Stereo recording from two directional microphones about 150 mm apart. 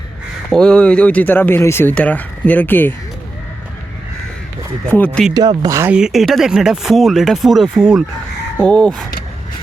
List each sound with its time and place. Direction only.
0.5 s speech: 5° left (ahead or behind)
4.9 s speech: 10° left (ahead or behind)
5.3 s speech: 25° right (ahead or behind)
5.9 s speech: 5° right (ahead or behind)